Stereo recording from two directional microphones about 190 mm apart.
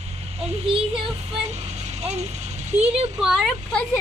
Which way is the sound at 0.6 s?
30° right (ahead or behind).